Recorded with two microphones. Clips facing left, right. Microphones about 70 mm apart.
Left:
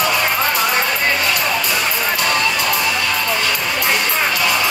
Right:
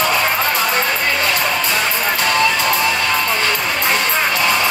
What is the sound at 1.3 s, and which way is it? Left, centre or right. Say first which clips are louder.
Music: right 1 dB; right.